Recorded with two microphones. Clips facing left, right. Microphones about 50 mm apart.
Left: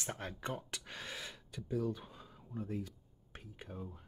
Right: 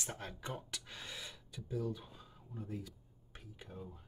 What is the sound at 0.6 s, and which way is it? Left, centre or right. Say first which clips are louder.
Speech: left 2 dB; left.